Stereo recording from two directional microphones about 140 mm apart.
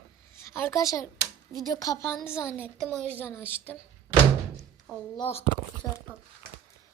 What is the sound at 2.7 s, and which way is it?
A woman's voice, 5° left (ahead or behind).